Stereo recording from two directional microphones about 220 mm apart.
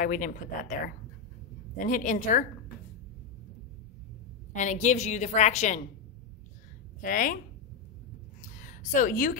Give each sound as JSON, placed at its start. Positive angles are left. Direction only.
{"t": 0.0, "sound": "a woman's voice", "side_deg": 40}
{"t": 4.6, "sound": "a woman's voice", "side_deg": 35}
{"t": 7.0, "sound": "speech", "side_deg": 35}
{"t": 8.4, "sound": "a sound", "side_deg": 35}